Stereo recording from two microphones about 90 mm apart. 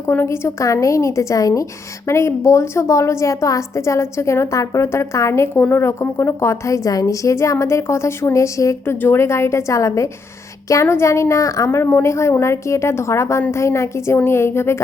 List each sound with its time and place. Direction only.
0.0 s a woman's voice: 30° left (ahead or behind)